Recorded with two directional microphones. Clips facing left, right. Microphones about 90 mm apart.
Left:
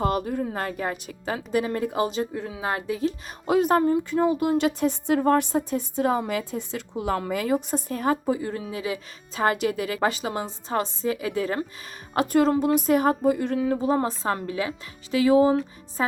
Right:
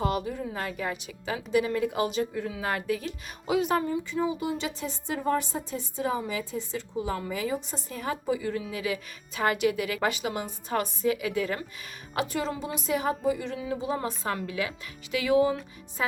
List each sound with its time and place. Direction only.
0.0 s a woman's voice: 45° left (ahead or behind); by 3.1 s 25° left (ahead or behind)
3.4 s a woman's voice: 45° left (ahead or behind)
12.1 s a woman's voice: 45° left (ahead or behind)